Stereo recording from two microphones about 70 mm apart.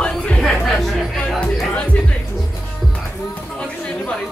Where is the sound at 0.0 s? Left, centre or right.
Centre.